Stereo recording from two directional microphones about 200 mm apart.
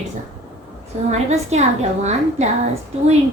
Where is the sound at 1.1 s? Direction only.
35° right (ahead or behind).